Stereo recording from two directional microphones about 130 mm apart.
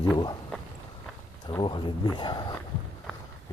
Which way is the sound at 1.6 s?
40° left (ahead or behind).